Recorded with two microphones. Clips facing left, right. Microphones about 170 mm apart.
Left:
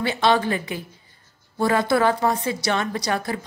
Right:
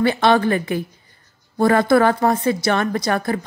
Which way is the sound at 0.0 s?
55° right (ahead or behind).